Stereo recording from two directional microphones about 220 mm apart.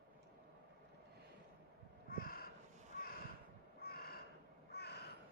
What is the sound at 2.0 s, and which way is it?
Crow, 40° left (ahead or behind).